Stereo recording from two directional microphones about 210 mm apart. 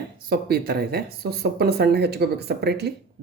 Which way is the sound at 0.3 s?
45° right (ahead or behind).